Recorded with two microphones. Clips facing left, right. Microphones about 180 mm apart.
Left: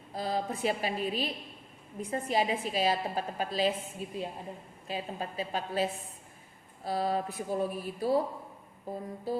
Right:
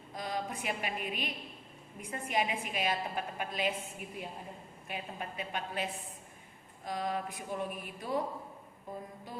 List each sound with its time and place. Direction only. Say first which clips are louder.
0.1 s a woman's voice: left 5 dB; 35° left (ahead or behind)